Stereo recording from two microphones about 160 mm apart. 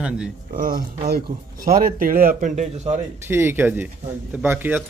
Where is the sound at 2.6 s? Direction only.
45° right (ahead or behind).